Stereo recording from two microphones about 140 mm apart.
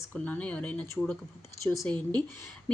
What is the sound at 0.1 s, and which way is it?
A woman's voice, 10° left (ahead or behind).